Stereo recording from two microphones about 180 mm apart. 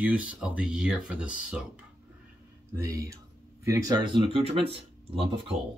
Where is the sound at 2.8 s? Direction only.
20° right (ahead or behind).